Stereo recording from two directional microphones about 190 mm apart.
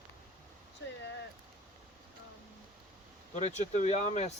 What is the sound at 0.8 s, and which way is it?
Speech, 60° left (ahead or behind).